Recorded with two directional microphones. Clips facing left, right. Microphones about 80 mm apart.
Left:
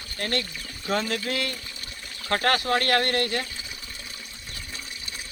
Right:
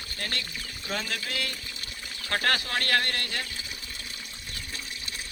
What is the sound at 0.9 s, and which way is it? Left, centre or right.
Speech, left.